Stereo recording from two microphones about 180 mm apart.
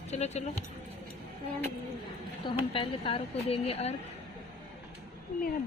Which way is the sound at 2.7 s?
30° left (ahead or behind).